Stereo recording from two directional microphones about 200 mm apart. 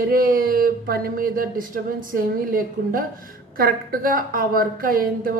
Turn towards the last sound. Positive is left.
turn(degrees=-45)  # may be behind; listen again after turning